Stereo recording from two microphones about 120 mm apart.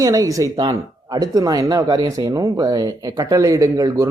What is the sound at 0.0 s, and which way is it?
Speech, 30° right (ahead or behind).